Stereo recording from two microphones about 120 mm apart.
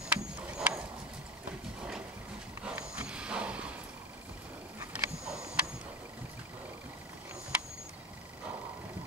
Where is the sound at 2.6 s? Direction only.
10° right (ahead or behind).